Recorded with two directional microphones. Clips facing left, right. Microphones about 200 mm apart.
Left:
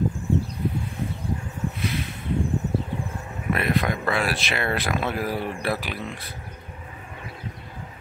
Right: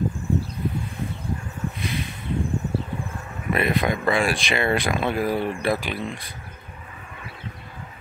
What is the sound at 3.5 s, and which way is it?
Speech, centre (ahead or behind).